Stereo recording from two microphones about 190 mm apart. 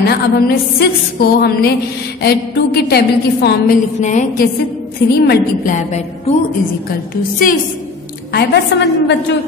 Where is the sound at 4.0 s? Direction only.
40° left (ahead or behind).